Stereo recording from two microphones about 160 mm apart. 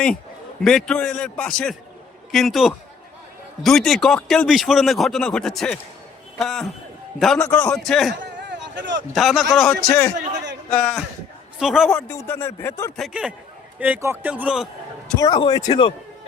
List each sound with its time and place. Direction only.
0.6 s speech: centre (ahead or behind)
8.1 s a sound: 90° right
9.1 s speech: centre (ahead or behind)
11.9 s speech: 15° left (ahead or behind)
13.0 s a man's voice: 5° right (ahead or behind)
15.2 s a man's voice: 25° left (ahead or behind)